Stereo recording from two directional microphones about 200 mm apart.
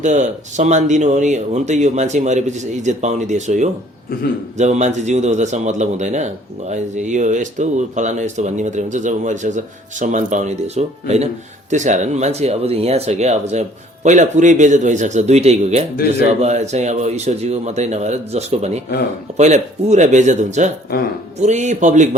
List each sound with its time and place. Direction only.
0.0 s speech: 35° right (ahead or behind)
4.1 s a man's voice: 45° left (ahead or behind)
4.5 s speech: 35° right (ahead or behind)